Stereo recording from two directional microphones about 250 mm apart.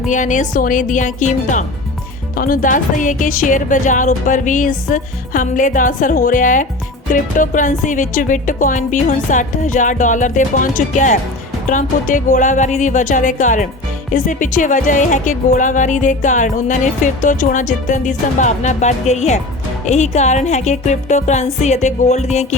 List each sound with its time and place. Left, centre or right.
0.1 s speech: left
11.7 s music: left